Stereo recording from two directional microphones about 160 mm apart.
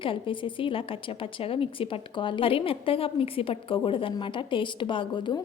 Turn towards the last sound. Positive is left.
turn(degrees=30)  # may be behind; listen again after turning